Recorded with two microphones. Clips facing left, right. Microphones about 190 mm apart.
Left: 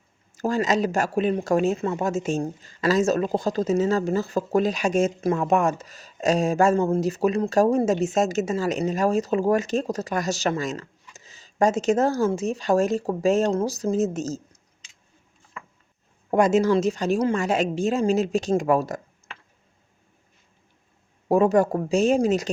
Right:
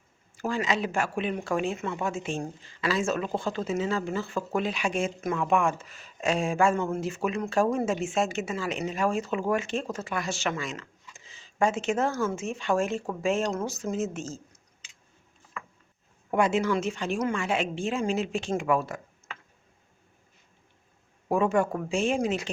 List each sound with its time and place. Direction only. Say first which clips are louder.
0.3 s speech: left 6 dB; 40° left (ahead or behind)
16.3 s speech: left 6 dB; 40° left (ahead or behind)
21.2 s speech: left 6 dB; 40° left (ahead or behind)